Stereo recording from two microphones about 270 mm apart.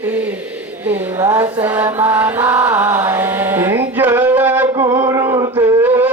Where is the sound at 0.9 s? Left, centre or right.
Centre.